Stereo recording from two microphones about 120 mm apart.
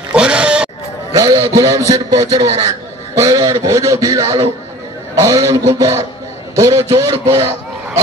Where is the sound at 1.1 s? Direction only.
30° right (ahead or behind).